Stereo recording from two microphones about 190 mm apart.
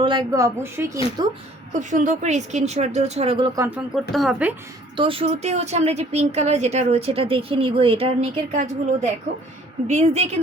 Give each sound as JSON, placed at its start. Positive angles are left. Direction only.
{"t": 0.0, "sound": "a woman's voice", "side_deg": -25}
{"t": 0.4, "sound": "a woman's voice", "side_deg": -15}
{"t": 1.8, "sound": "a woman's voice", "side_deg": -40}
{"t": 4.1, "sound": "a woman's voice", "side_deg": 0}
{"t": 4.9, "sound": "a woman's voice", "side_deg": -30}